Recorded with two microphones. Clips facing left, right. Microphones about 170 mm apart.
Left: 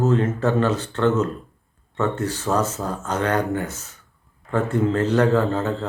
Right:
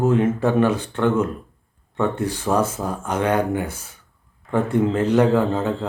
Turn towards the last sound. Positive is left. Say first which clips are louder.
# right 1 dB
turn(degrees=-10)  # may be behind; listen again after turning